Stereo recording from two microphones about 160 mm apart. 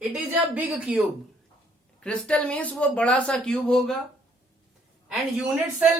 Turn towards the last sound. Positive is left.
turn(degrees=-5)  # may be behind; listen again after turning